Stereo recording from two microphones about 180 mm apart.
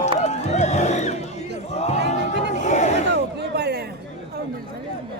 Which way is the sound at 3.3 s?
65° right (ahead or behind).